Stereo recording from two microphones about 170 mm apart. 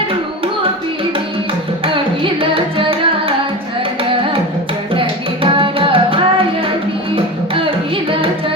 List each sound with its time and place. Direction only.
2.2 s music: 30° right (ahead or behind)
4.9 s music: 30° right (ahead or behind)